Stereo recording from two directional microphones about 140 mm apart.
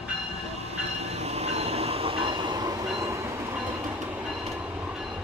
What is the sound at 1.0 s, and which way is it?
Train, 50° right (ahead or behind).